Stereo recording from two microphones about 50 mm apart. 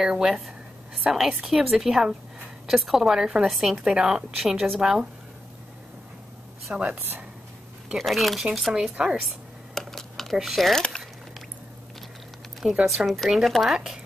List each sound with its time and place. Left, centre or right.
0.0 s a woman's voice: centre
3.4 s a woman's voice: centre
3.7 s a woman's voice: centre
6.7 s a woman's voice: right
8.0 s a woman's voice: centre
8.9 s a woman's voice: centre
9.8 s computer keyboard: centre
10.3 s a woman's voice: centre
10.7 s speech: centre
12.8 s a woman's voice: centre